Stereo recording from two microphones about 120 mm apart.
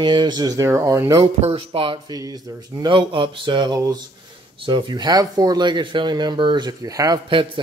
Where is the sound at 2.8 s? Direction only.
45° right (ahead or behind).